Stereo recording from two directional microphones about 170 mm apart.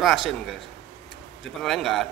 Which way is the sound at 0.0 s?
Centre (ahead or behind).